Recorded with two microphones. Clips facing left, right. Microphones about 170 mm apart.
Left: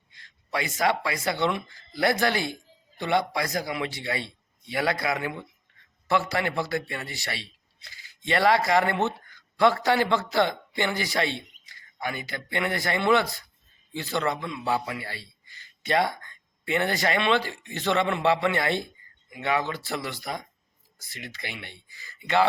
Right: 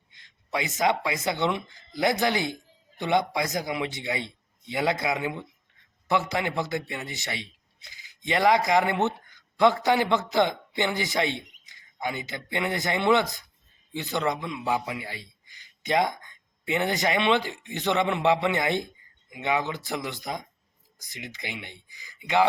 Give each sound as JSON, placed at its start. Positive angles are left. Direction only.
{"t": 0.1, "sound": "a man's voice", "side_deg": -20}